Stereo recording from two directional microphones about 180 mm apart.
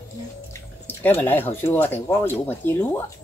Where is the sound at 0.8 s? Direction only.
10° left (ahead or behind).